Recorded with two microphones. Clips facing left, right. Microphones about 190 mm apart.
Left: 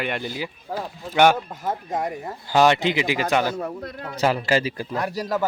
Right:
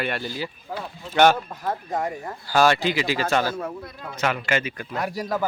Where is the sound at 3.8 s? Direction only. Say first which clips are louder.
Left 5 dB; 60° left (ahead or behind).